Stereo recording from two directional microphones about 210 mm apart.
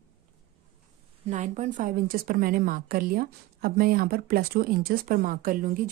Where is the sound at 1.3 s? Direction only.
35° right (ahead or behind).